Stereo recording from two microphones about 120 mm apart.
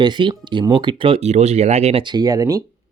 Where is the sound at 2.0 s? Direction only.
35° right (ahead or behind).